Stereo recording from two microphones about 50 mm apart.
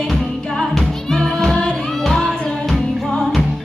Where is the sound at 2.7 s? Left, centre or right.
Centre.